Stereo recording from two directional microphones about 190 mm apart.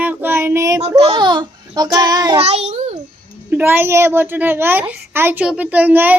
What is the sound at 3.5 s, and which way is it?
A child's voice, 10° right (ahead or behind).